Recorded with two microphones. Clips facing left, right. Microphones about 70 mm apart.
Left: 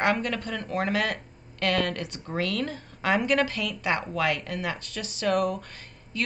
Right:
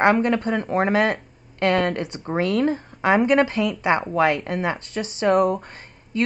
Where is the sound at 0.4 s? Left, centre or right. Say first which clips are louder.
Right 8 dB; right.